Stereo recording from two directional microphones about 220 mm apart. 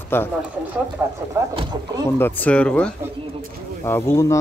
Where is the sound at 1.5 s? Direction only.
25° right (ahead or behind).